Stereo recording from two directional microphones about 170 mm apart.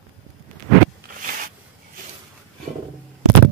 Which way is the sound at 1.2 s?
50° right (ahead or behind).